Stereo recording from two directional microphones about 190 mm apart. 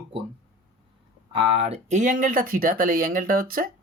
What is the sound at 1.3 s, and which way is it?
Speech, 30° right (ahead or behind).